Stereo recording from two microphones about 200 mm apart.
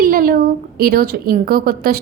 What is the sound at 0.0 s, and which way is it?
Speech, 45° right (ahead or behind).